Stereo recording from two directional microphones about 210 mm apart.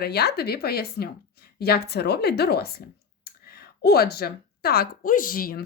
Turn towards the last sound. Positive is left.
turn(degrees=45)  # may be behind; listen again after turning